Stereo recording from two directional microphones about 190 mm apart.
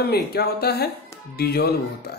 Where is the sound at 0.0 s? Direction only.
55° left (ahead or behind).